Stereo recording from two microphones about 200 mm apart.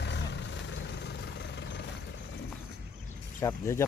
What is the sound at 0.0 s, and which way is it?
Vehicle, 60° left (ahead or behind).